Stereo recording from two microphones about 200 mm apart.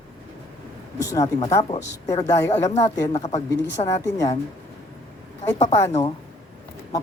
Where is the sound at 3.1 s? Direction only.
35° left (ahead or behind).